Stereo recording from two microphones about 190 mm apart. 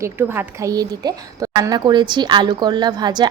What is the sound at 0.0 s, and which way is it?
A woman's voice, 10° right (ahead or behind).